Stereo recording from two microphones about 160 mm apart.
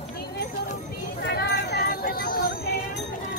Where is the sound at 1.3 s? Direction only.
90° left.